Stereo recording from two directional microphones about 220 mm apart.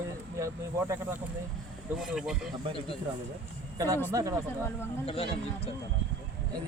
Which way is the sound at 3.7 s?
15° right (ahead or behind).